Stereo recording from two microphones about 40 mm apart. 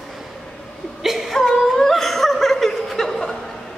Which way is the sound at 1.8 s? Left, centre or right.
Centre.